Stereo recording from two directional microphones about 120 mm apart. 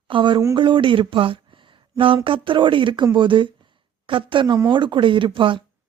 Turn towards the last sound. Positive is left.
turn(degrees=-45)  # may be behind; listen again after turning